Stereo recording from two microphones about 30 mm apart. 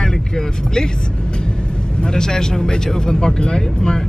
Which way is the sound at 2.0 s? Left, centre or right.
Left.